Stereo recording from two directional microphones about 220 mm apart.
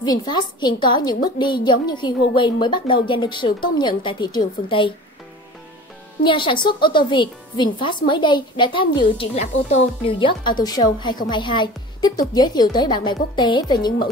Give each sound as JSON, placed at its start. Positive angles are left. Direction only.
{"t": 0.0, "sound": "a woman's voice", "side_deg": 20}
{"t": 6.2, "sound": "a woman's voice", "side_deg": 20}